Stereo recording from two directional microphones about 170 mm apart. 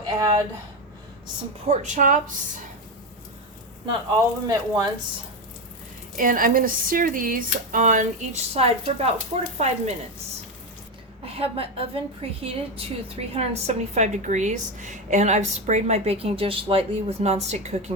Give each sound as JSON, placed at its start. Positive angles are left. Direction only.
{"t": 0.0, "sound": "speech", "side_deg": -20}
{"t": 1.6, "sound": "speech", "side_deg": -45}
{"t": 4.4, "sound": "speech", "side_deg": -25}
{"t": 6.1, "sound": "speech", "side_deg": -55}
{"t": 11.3, "sound": "a woman's voice", "side_deg": -35}